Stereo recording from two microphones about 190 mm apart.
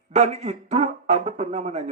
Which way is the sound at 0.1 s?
35° right (ahead or behind).